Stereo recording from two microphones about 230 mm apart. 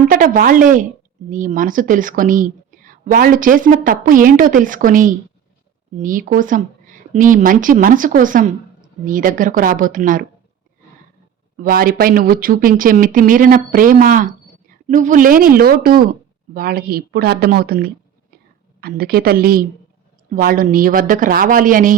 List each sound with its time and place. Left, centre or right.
0.1 s a woman's voice: right
11.5 s speech: right